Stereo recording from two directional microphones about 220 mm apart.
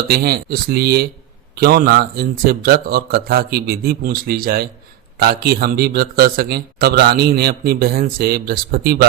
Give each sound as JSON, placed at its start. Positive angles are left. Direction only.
{"t": 0.1, "sound": "a man's voice", "side_deg": -45}